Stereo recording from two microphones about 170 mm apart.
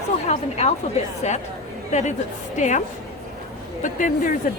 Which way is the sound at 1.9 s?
45° left (ahead or behind).